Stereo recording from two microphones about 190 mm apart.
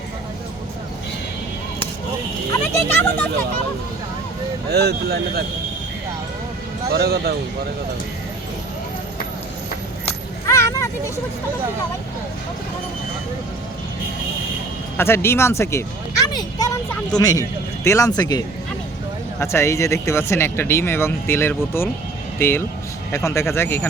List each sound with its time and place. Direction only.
2.5 s speech: 15° left (ahead or behind)
4.7 s speech: 60° right (ahead or behind)
6.9 s speech: 55° right (ahead or behind)
10.5 s a sound: 15° left (ahead or behind)
14.9 s speech: 10° left (ahead or behind)